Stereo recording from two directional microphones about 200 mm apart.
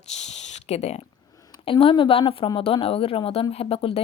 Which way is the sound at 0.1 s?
35° left (ahead or behind).